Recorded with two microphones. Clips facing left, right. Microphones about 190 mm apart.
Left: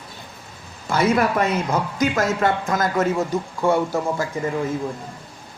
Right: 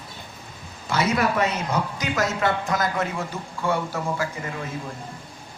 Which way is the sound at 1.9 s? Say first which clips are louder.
Left 5 dB; 50° left (ahead or behind).